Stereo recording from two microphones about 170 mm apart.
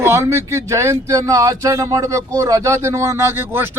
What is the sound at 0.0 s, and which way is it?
Speech, 15° right (ahead or behind).